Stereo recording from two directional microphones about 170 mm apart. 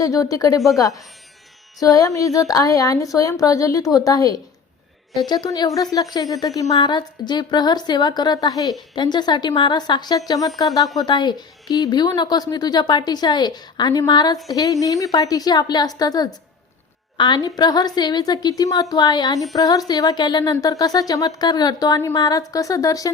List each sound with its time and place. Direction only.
0.0 s speech: 20° left (ahead or behind)
1.8 s speech: 20° left (ahead or behind)